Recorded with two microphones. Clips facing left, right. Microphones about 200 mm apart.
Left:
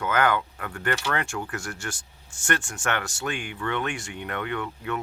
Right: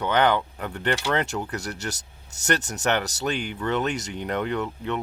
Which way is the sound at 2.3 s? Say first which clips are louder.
Right 3 dB; 40° right (ahead or behind).